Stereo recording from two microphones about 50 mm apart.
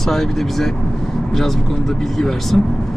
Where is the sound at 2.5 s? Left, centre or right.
Centre.